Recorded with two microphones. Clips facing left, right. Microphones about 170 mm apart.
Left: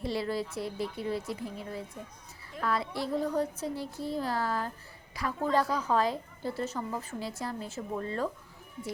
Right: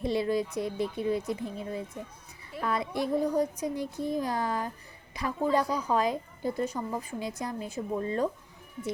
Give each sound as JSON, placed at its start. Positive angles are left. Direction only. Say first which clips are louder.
{"t": 0.0, "sound": "a woman's voice", "louder": "right 4 dB", "side_deg": -20}